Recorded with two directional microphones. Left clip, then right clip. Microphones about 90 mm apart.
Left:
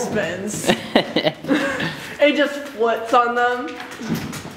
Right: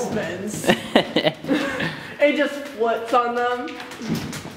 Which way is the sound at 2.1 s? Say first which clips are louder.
Left 2 dB; 30° left (ahead or behind).